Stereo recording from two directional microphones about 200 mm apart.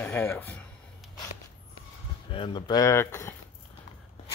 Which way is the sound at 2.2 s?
25° left (ahead or behind).